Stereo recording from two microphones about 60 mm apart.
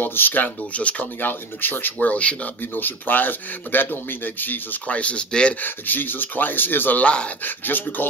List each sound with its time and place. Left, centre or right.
0.0 s speech: left; by 5.6 s centre
5.6 s speech: left